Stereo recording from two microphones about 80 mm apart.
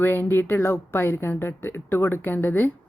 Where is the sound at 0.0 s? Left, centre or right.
Left.